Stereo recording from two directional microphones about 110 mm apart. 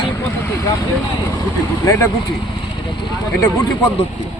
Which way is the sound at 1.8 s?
30° left (ahead or behind).